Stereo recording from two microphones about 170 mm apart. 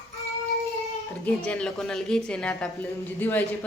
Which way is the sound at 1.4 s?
5° left (ahead or behind).